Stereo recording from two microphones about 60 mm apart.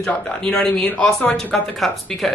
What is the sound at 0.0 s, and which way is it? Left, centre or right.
Speech, left.